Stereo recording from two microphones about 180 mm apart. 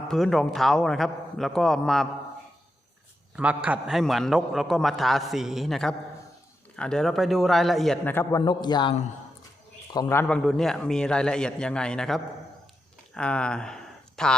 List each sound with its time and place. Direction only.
0.1 s a man's voice: centre (ahead or behind)
3.3 s a man's voice: 5° right (ahead or behind); by 8.4 s 15° left (ahead or behind)
8.4 s a man's voice: 25° left (ahead or behind); by 14.3 s 5° left (ahead or behind)